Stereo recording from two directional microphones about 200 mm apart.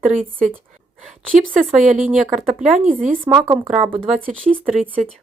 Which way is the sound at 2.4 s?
Centre (ahead or behind).